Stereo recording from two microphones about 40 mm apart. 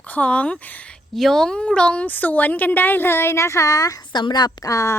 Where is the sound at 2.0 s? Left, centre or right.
Left.